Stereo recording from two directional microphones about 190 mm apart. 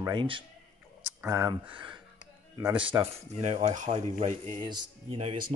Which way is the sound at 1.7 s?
25° right (ahead or behind).